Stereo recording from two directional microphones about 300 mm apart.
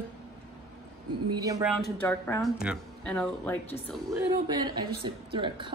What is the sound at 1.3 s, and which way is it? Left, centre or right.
Speech, centre.